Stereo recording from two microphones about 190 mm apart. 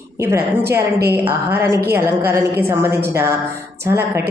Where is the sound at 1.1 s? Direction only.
10° right (ahead or behind).